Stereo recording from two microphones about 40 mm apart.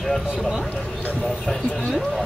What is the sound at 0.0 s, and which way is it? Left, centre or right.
Speech, centre.